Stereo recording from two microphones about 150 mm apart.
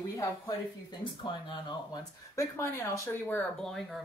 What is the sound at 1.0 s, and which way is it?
Speech, 30° left (ahead or behind).